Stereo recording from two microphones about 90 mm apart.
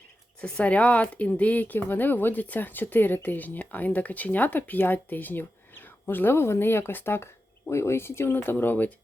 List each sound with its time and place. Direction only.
0.4 s speech: 10° left (ahead or behind)